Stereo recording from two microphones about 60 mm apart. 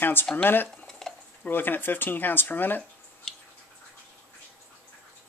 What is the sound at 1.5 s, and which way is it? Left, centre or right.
Speech, left.